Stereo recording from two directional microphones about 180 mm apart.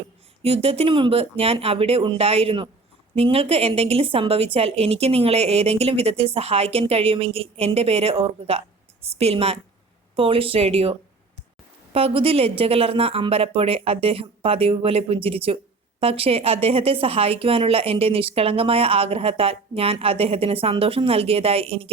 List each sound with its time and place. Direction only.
0.4 s speech: 35° right (ahead or behind)
11.9 s speech: 30° right (ahead or behind)